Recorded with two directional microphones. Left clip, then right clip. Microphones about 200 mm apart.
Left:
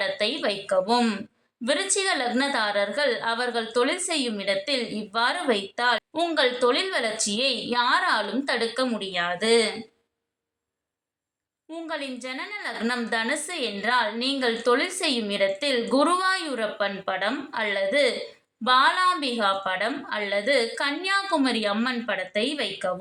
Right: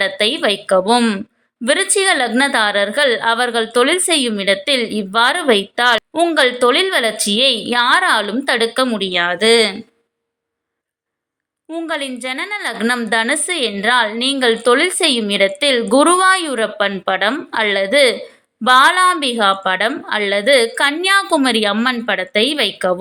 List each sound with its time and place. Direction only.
0.0 s a woman's voice: 30° right (ahead or behind)
11.7 s a woman's voice: 35° right (ahead or behind)